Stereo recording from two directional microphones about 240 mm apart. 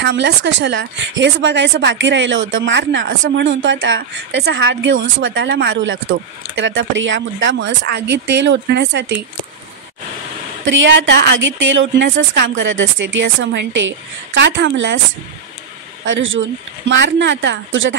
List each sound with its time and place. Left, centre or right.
0.0 s a woman's voice: right
10.6 s a woman's voice: right
16.1 s a woman's voice: right